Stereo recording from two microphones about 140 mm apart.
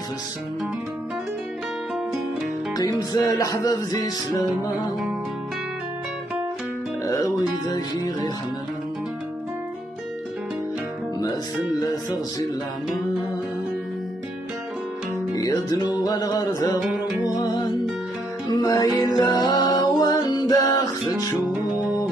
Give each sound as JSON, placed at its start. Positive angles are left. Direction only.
{"t": 2.7, "sound": "music", "side_deg": 25}
{"t": 7.1, "sound": "music", "side_deg": 25}
{"t": 15.3, "sound": "music", "side_deg": 25}
{"t": 18.5, "sound": "music", "side_deg": 25}